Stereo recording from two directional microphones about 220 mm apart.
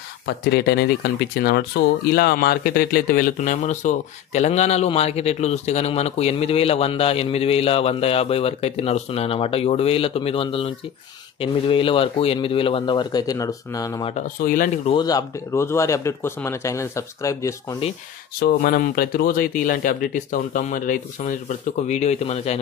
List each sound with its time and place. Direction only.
0.4 s a man's voice: 50° left (ahead or behind); by 14.1 s 15° left (ahead or behind)
14.1 s speech: 35° left (ahead or behind)
15.0 s speech: 15° left (ahead or behind)
18.4 s speech: 45° left (ahead or behind)